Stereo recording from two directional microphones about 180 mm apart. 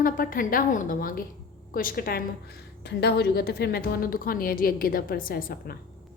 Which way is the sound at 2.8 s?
65° left (ahead or behind).